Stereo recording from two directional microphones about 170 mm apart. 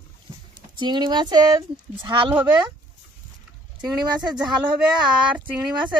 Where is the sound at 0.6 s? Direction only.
25° right (ahead or behind).